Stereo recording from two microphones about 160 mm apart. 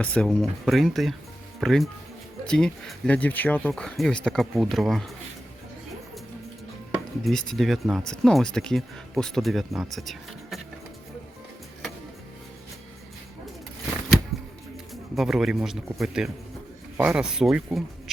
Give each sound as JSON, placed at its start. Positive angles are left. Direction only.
{"t": 0.0, "sound": "speech", "side_deg": 5}
{"t": 7.3, "sound": "speech", "side_deg": 5}
{"t": 15.1, "sound": "speech", "side_deg": 0}